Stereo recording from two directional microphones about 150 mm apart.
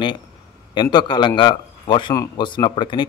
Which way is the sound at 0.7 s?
30° left (ahead or behind).